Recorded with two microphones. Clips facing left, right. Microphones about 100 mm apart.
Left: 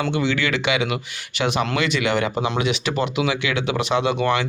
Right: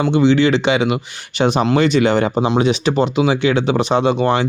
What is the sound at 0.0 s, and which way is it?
Speech, 25° right (ahead or behind).